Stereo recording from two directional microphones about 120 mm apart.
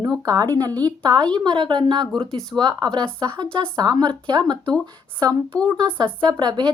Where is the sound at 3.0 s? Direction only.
10° left (ahead or behind).